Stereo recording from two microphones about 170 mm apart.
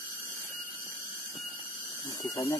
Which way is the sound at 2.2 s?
20° left (ahead or behind).